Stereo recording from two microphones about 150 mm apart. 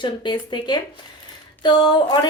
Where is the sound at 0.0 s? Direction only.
30° left (ahead or behind).